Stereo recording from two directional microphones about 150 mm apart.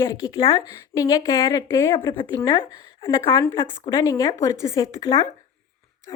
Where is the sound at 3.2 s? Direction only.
20° left (ahead or behind).